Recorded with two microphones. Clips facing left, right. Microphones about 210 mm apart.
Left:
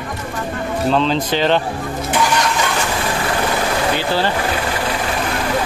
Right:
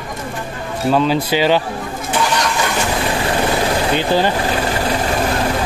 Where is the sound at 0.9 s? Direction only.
10° right (ahead or behind).